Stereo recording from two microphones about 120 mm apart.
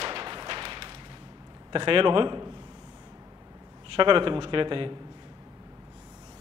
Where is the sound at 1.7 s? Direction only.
45° right (ahead or behind).